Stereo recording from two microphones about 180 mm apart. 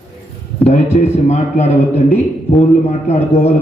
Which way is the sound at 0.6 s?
40° left (ahead or behind).